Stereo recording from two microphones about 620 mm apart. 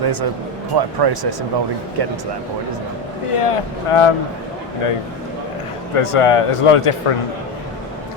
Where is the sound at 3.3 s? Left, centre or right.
Left.